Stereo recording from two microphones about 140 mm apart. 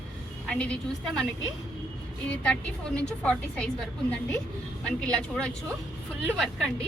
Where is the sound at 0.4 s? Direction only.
5° left (ahead or behind).